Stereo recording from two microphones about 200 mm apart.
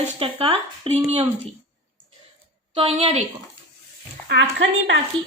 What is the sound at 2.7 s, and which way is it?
Speech, 30° right (ahead or behind).